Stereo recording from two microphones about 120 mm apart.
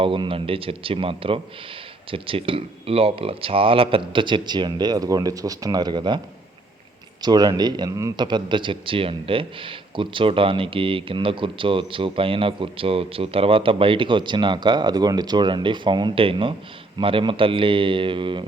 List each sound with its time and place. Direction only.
0.0 s speech: 45° right (ahead or behind)
7.2 s speech: 35° right (ahead or behind)